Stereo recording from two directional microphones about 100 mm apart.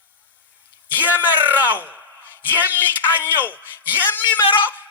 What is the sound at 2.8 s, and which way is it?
A man's voice, 20° left (ahead or behind).